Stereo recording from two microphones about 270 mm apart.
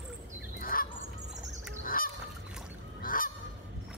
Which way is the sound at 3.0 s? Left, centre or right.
Left.